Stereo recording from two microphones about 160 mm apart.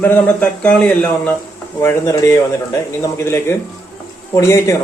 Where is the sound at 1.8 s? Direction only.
20° left (ahead or behind).